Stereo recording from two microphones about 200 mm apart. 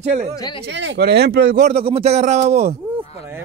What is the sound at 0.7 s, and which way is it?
Speech, 60° right (ahead or behind).